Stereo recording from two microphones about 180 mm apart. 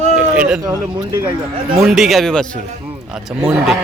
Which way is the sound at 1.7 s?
Centre (ahead or behind).